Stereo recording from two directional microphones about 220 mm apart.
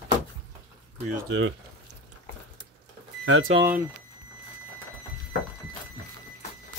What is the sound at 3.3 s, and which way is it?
Speech, 65° right (ahead or behind).